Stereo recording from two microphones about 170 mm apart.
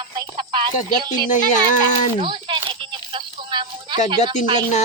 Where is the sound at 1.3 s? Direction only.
50° left (ahead or behind).